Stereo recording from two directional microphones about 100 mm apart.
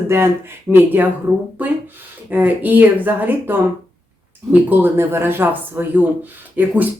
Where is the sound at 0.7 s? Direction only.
20° right (ahead or behind).